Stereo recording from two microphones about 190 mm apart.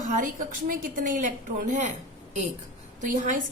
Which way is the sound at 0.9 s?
45° right (ahead or behind).